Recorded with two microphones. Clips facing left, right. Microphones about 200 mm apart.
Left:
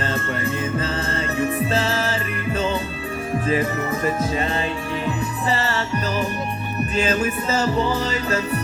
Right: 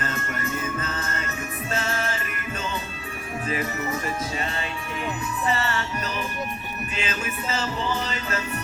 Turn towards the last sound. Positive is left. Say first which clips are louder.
# left 8 dB
turn(degrees=40)  # may be behind; listen again after turning